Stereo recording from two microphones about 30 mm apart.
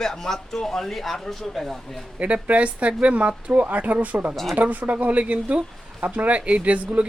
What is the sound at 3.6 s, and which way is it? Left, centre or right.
Speech, right.